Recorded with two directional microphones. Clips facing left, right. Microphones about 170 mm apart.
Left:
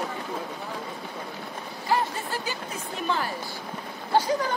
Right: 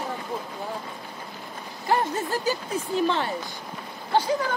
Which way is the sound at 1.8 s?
40° right (ahead or behind).